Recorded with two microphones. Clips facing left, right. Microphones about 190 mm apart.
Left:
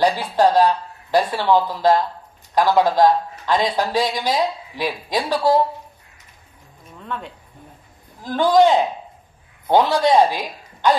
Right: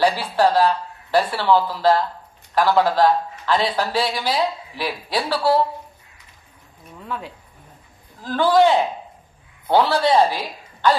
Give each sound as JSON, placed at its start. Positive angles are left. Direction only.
{"t": 0.0, "sound": "speech", "side_deg": 15}
{"t": 7.0, "sound": "speech", "side_deg": -5}
{"t": 8.2, "sound": "speech", "side_deg": 15}